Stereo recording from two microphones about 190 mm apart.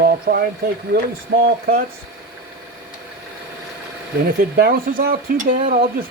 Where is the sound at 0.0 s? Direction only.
50° right (ahead or behind).